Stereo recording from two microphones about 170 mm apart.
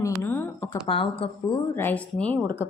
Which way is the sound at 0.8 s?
30° left (ahead or behind).